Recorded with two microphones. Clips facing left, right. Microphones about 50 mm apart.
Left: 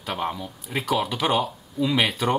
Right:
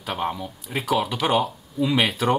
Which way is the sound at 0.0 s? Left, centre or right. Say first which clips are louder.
Right 1 dB; centre.